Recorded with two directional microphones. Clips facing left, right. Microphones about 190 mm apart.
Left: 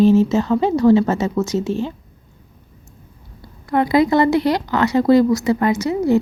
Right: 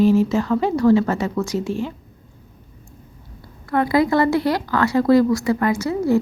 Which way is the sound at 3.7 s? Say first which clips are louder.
Left 2 dB; 20° left (ahead or behind).